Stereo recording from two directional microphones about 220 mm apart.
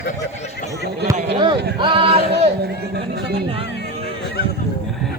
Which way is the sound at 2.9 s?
45° right (ahead or behind).